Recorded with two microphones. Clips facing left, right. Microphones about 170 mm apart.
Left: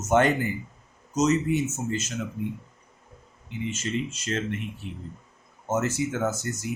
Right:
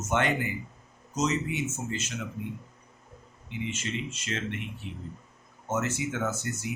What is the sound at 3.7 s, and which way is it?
Speech, 40° left (ahead or behind).